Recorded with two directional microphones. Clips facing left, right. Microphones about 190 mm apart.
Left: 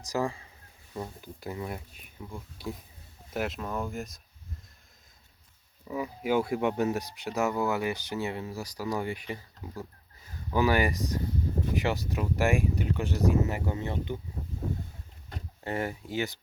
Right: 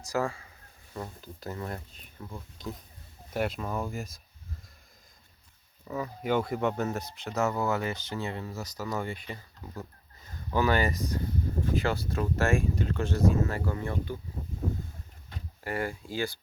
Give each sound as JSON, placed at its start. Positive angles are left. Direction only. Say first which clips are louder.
{"t": 0.0, "sound": "speech", "louder": "even", "side_deg": 15}
{"t": 5.9, "sound": "speech", "louder": "left 1 dB", "side_deg": 10}
{"t": 15.6, "sound": "speech", "louder": "left 1 dB", "side_deg": 25}